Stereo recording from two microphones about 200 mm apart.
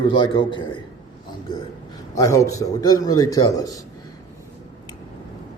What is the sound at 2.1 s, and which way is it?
A man's voice, 15° left (ahead or behind).